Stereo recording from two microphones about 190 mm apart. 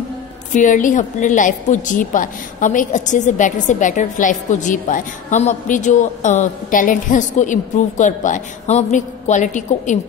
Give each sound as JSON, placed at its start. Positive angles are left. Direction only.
{"t": 0.5, "sound": "a woman's voice", "side_deg": 40}